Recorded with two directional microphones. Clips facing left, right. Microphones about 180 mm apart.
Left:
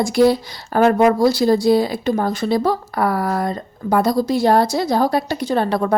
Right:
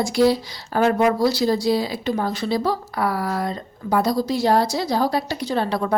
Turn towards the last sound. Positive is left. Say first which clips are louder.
# left 4 dB
turn(degrees=50)  # may be behind; listen again after turning